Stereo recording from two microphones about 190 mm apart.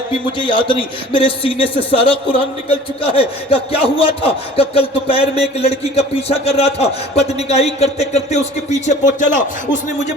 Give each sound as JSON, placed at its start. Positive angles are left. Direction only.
{"t": 0.3, "sound": "a man's voice", "side_deg": 25}
{"t": 3.0, "sound": "speech", "side_deg": 30}